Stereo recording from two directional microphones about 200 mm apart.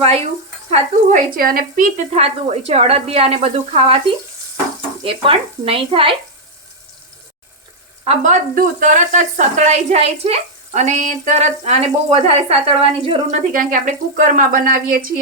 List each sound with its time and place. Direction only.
0.0 s speech: 30° right (ahead or behind)
0.7 s speech: 40° right (ahead or behind)
5.0 s speech: 25° right (ahead or behind)
8.0 s speech: 35° right (ahead or behind)
13.5 s speech: 40° right (ahead or behind)